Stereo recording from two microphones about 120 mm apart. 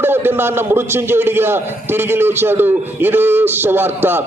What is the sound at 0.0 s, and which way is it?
A man's voice, 20° right (ahead or behind).